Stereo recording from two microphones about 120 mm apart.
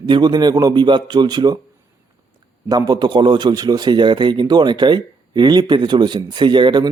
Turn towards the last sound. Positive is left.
turn(degrees=-40)  # may be behind; listen again after turning